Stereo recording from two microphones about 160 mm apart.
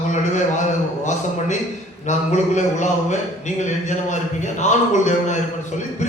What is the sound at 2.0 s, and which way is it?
A man's voice, 50° left (ahead or behind).